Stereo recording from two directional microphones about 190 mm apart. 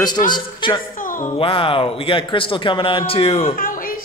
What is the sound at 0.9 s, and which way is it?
A man's voice, 45° left (ahead or behind).